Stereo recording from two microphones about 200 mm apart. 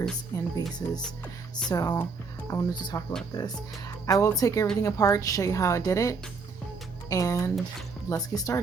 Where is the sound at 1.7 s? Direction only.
20° left (ahead or behind).